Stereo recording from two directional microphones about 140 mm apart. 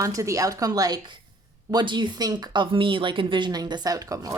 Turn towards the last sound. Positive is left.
turn(degrees=-25)  # may be behind; listen again after turning